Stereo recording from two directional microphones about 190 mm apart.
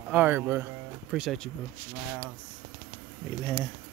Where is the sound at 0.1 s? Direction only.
10° right (ahead or behind).